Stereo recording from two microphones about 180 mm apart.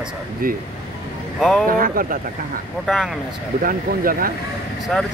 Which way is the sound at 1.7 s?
50° right (ahead or behind).